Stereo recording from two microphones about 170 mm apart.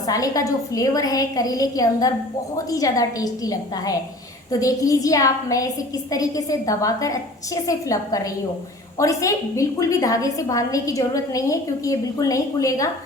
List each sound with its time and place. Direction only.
0.1 s a woman's voice: 20° left (ahead or behind)